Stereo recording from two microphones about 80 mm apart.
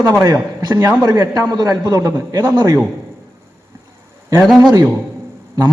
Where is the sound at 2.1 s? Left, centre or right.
Right.